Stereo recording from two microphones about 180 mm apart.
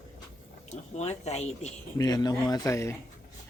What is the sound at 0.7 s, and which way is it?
Speech, 40° left (ahead or behind).